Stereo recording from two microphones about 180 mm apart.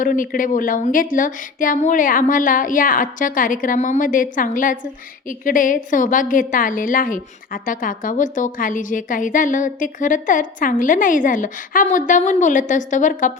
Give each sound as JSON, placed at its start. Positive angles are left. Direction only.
{"t": 0.0, "sound": "a woman's voice", "side_deg": 50}